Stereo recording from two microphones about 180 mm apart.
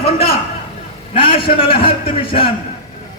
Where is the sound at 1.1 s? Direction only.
30° left (ahead or behind).